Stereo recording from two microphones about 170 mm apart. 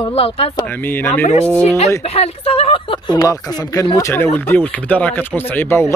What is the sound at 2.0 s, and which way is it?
Speech, 35° left (ahead or behind).